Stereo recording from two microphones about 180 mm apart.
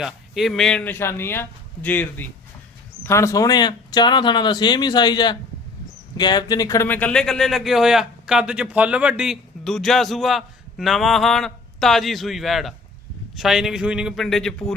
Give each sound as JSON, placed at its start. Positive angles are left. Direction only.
{"t": 0.0, "sound": "speech", "side_deg": 0}